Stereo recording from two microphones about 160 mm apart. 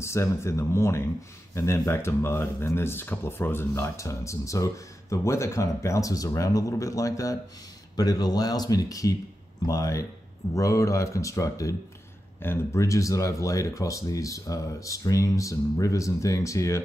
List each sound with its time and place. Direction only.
0.0 s speech: 15° left (ahead or behind)